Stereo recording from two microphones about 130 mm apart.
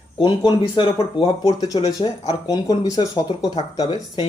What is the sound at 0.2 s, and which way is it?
Speech, 40° left (ahead or behind).